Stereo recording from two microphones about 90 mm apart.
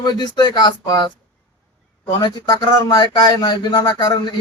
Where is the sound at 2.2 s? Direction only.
50° left (ahead or behind).